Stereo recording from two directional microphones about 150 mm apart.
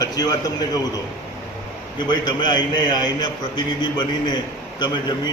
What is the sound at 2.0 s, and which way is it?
A man's voice, 30° left (ahead or behind).